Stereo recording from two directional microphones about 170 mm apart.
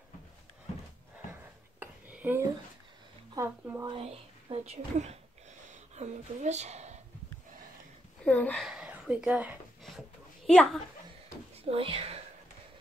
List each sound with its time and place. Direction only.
1.8 s a sound: 10° right (ahead or behind)
3.3 s a woman's voice: 10° right (ahead or behind)
3.9 s speech: 35° right (ahead or behind)
8.3 s speech: 10° left (ahead or behind)
8.6 s a sound: 5° right (ahead or behind)
10.4 s a child's voice: 5° left (ahead or behind)
11.6 s speech: 35° right (ahead or behind)